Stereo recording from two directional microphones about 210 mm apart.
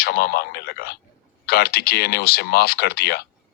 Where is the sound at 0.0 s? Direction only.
50° left (ahead or behind).